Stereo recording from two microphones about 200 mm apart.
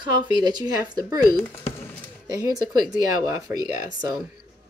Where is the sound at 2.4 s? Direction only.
20° right (ahead or behind).